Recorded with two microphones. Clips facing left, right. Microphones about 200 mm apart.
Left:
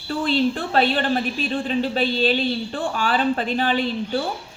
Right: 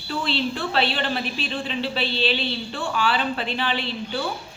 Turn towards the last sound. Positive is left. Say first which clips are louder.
# left 5 dB
turn(degrees=45)  # may be behind; listen again after turning